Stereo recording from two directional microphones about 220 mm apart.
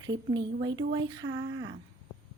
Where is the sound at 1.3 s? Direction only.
60° right (ahead or behind).